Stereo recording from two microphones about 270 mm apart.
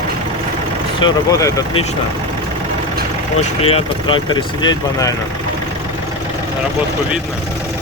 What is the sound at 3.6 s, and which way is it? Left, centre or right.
Speech, left.